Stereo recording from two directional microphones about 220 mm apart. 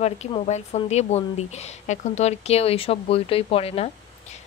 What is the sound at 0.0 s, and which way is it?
A woman's voice, 30° left (ahead or behind).